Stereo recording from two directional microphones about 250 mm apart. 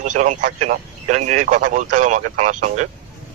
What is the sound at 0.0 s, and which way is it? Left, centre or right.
Speech, right.